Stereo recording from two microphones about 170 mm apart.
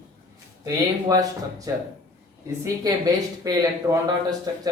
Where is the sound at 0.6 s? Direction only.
20° right (ahead or behind).